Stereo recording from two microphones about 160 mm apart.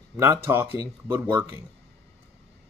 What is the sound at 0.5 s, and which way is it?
A man's voice, 15° right (ahead or behind).